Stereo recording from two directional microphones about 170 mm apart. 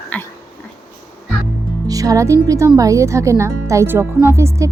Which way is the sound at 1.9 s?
20° right (ahead or behind).